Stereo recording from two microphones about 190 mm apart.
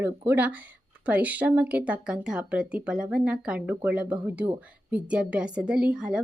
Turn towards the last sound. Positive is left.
turn(degrees=-5)  # may be behind; listen again after turning